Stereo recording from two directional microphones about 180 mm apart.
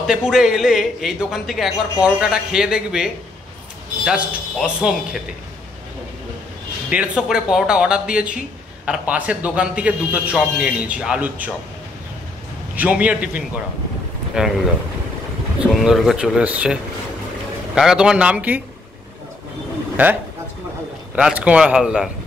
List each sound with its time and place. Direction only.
0.0 s a man's voice: 5° right (ahead or behind)
6.9 s a man's voice: 5° right (ahead or behind)
12.7 s a man's voice: 10° right (ahead or behind)
15.6 s a man's voice: centre (ahead or behind)
20.0 s a man's voice: 10° right (ahead or behind)